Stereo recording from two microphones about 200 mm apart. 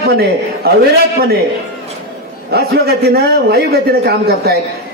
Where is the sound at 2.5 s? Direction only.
55° right (ahead or behind).